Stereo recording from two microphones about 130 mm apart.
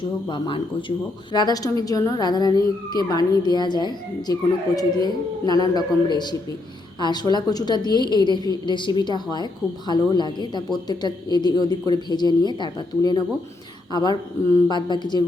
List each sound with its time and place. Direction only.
0.3 s a woman's voice: 35° left (ahead or behind)